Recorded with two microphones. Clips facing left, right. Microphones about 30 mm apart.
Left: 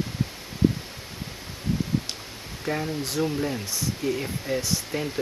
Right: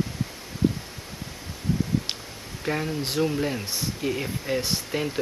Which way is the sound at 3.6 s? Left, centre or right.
Right.